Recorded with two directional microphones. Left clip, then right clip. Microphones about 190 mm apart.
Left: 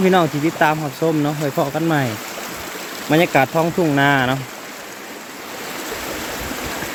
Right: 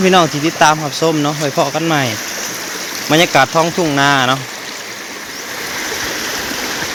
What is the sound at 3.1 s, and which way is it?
Speech, 5° left (ahead or behind).